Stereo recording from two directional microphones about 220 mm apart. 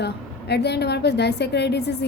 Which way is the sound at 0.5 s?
50° left (ahead or behind).